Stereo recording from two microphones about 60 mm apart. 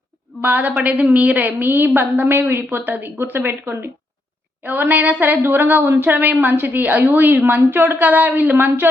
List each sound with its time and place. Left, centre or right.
0.4 s a woman's voice: right